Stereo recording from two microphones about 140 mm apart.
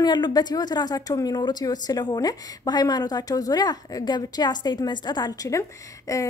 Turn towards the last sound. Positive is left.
turn(degrees=25)  # may be behind; listen again after turning